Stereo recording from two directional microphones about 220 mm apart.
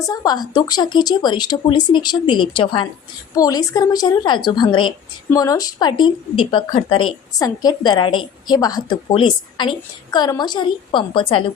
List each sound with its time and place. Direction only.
0.0 s a woman's voice: 15° left (ahead or behind)